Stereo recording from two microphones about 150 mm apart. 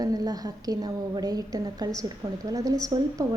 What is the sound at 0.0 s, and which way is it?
A woman's voice, 25° right (ahead or behind).